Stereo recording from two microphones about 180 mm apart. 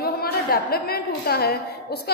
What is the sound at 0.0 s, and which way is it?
A woman's voice, 60° left (ahead or behind).